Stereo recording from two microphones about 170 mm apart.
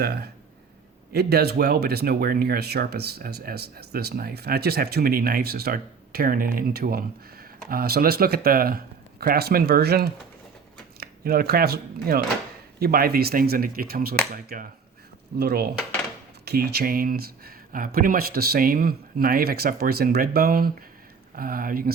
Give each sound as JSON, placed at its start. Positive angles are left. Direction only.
{"t": 0.0, "sound": "speech", "side_deg": -70}
{"t": 15.4, "sound": "speech", "side_deg": -65}